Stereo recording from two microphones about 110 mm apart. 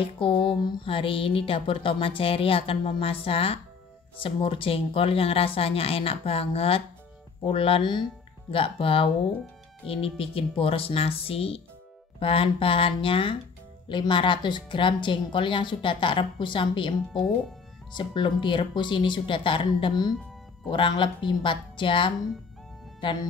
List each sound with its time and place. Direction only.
0.0 s speech: 55° left (ahead or behind)